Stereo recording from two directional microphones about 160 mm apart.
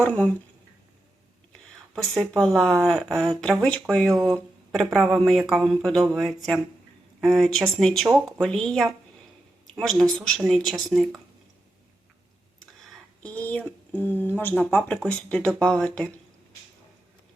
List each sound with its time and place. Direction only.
0.0 s speech: 10° left (ahead or behind)
2.6 s speech: centre (ahead or behind)
4.1 s speech: 20° right (ahead or behind)
4.7 s speech: centre (ahead or behind)
12.8 s speech: 10° left (ahead or behind)